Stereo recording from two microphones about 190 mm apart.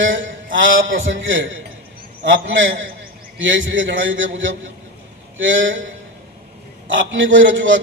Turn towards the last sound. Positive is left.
turn(degrees=-80)